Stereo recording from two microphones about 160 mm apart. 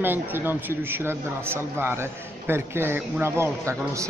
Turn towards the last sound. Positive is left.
turn(degrees=-15)  # may be behind; listen again after turning